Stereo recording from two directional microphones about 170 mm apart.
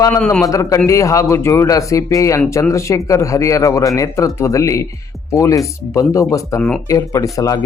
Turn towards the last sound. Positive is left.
turn(degrees=20)  # may be behind; listen again after turning